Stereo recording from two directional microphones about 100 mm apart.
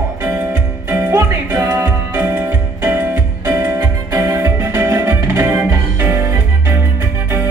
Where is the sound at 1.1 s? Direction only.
25° right (ahead or behind).